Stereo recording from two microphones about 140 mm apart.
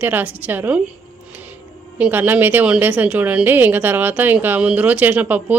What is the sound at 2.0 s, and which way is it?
A woman's voice, 15° right (ahead or behind).